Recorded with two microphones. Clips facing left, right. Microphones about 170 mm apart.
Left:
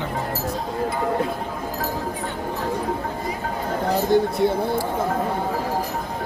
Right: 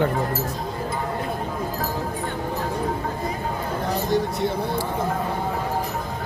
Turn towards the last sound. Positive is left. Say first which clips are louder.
# left 4 dB
turn(degrees=55)  # may be behind; listen again after turning